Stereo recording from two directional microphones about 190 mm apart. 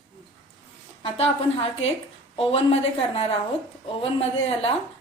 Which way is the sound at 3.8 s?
30° left (ahead or behind).